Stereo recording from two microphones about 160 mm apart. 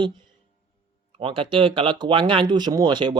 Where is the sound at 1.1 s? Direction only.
35° right (ahead or behind).